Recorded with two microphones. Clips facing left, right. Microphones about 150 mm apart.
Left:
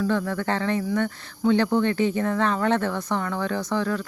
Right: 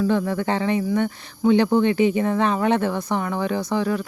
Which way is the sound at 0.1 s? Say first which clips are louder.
Right 3 dB; 15° right (ahead or behind).